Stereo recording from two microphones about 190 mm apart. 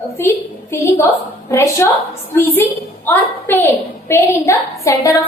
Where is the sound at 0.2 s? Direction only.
15° left (ahead or behind).